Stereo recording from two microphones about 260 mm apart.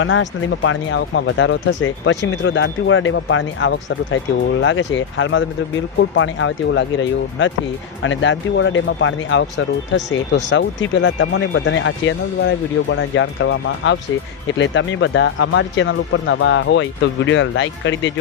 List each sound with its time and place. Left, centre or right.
0.0 s speech: left